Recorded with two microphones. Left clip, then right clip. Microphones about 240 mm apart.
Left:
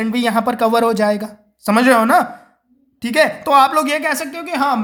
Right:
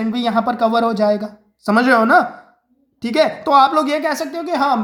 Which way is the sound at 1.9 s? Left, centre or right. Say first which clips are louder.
Right 1 dB; left.